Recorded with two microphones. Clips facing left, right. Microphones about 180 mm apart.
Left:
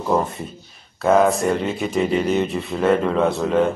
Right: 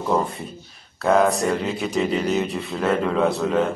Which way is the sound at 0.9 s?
Centre (ahead or behind).